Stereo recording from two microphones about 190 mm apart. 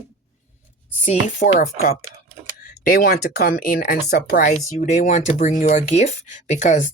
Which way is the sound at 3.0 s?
55° left (ahead or behind).